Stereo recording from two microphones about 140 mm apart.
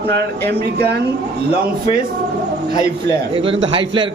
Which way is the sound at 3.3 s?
40° right (ahead or behind).